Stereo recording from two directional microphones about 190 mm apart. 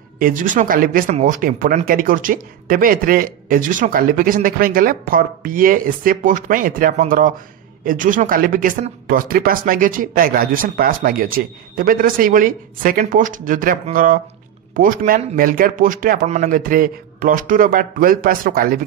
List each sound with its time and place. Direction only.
0.2 s speech: 45° right (ahead or behind)